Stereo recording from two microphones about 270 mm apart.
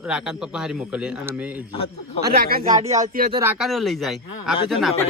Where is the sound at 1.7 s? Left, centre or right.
Left.